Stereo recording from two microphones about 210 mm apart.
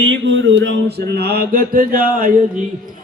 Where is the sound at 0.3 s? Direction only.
60° right (ahead or behind); by 2.3 s 45° right (ahead or behind).